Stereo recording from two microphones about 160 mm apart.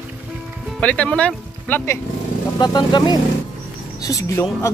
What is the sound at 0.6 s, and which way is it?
Speech, 5° left (ahead or behind).